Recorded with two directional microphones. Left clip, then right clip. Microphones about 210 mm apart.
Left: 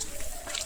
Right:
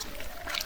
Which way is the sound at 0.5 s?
55° right (ahead or behind).